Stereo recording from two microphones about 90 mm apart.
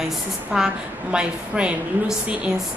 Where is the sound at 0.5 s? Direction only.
10° right (ahead or behind).